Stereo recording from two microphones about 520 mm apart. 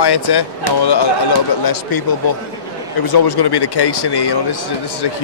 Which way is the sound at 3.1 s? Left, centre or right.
Left.